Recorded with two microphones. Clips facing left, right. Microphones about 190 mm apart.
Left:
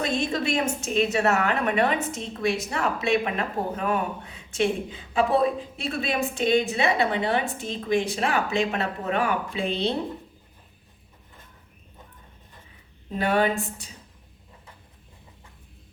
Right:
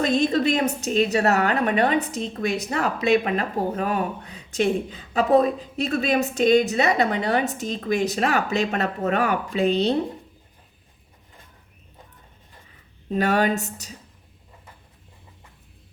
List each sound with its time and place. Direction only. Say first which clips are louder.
0.0 s a woman's voice: right 6 dB; 35° right (ahead or behind)
13.1 s a woman's voice: right 2 dB; 40° right (ahead or behind)